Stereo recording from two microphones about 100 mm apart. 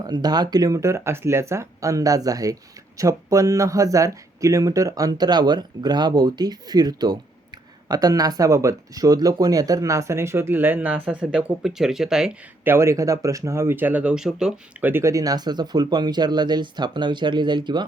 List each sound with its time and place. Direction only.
0.0 s speech: 45° right (ahead or behind); by 12.4 s 5° right (ahead or behind)
12.6 s speech: 25° right (ahead or behind); by 14.5 s 5° right (ahead or behind)
14.8 s speech: 20° right (ahead or behind)
15.0 s speech: 35° right (ahead or behind)